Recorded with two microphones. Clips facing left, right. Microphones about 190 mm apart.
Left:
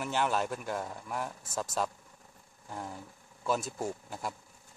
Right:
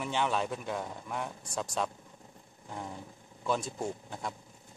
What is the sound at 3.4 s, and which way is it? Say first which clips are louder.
Speech: even; 5° left (ahead or behind).